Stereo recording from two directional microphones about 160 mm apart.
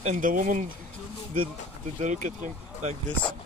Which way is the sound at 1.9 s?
50° right (ahead or behind).